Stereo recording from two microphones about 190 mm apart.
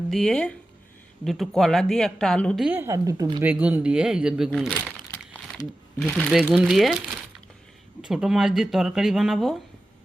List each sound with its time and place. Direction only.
0.1 s speech: centre (ahead or behind)
2.6 s speech: 15° right (ahead or behind)
3.4 s speech: 5° right (ahead or behind)
8.0 s speech: 5° right (ahead or behind)